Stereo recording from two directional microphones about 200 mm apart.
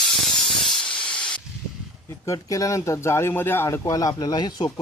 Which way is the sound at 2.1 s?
15° left (ahead or behind).